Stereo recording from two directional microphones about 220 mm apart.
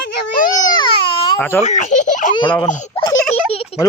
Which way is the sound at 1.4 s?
10° left (ahead or behind).